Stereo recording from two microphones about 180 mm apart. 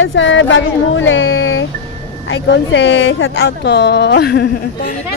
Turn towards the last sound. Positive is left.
turn(degrees=60)  # may be behind; listen again after turning